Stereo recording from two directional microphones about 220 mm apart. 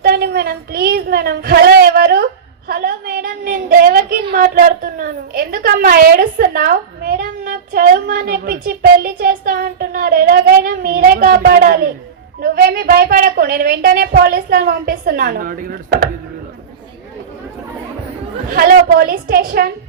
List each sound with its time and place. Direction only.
0.0 s a sound: 45° right (ahead or behind)
12.4 s a woman's voice: 40° right (ahead or behind)
18.5 s a woman's voice: 45° right (ahead or behind)